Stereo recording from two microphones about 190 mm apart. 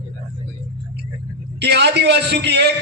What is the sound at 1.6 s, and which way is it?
A man's voice, 60° right (ahead or behind).